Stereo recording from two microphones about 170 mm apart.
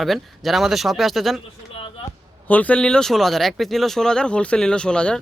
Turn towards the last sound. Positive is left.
turn(degrees=5)  # may be behind; listen again after turning